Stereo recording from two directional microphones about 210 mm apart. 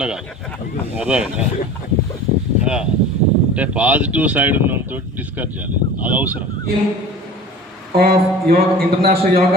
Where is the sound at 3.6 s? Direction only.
5° right (ahead or behind).